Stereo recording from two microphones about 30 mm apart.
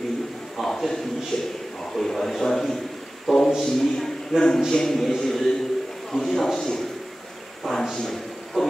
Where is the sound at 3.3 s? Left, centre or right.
Centre.